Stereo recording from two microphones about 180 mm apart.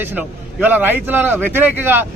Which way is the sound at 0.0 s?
10° right (ahead or behind).